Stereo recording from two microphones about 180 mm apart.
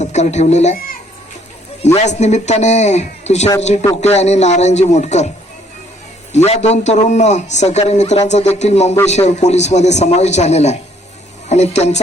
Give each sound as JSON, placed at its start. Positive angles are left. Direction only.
{"t": 0.0, "sound": "speech", "side_deg": 40}
{"t": 1.8, "sound": "a man's voice", "side_deg": 40}
{"t": 6.3, "sound": "a man's voice", "side_deg": 40}